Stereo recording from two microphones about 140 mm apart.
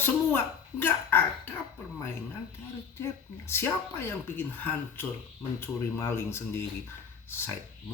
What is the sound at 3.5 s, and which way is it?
Speech, 20° left (ahead or behind).